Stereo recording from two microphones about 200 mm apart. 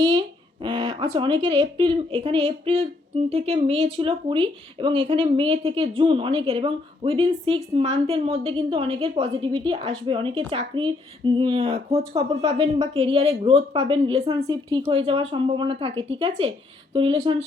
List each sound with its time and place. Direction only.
0.0 s speech: 20° right (ahead or behind)
11.7 s speech: 15° right (ahead or behind)
12.9 s speech: 30° right (ahead or behind)